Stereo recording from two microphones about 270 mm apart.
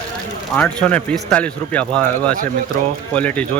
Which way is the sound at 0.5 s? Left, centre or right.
Centre.